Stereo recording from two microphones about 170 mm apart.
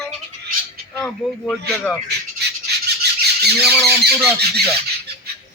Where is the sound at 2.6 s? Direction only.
75° right (ahead or behind).